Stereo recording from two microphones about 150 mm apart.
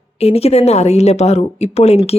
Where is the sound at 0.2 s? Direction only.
45° left (ahead or behind).